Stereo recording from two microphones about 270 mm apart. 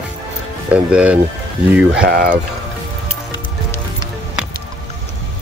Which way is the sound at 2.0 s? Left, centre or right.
Right.